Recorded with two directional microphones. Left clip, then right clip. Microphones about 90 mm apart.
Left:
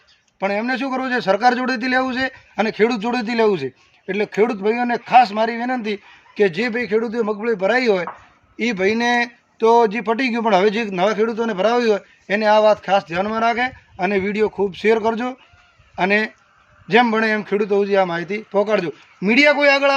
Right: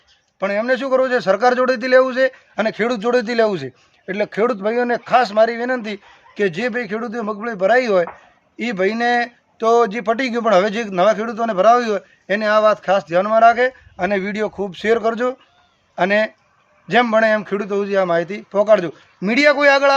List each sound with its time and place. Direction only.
0.3 s a man's voice: 40° right (ahead or behind)